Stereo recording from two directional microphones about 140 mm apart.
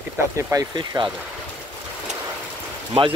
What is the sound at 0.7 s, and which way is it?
Speech, 35° right (ahead or behind).